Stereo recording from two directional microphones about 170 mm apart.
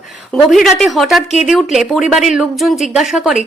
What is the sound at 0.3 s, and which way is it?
Speech, centre (ahead or behind).